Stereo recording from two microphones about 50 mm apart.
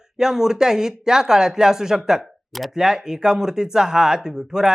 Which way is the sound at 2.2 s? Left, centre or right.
Centre.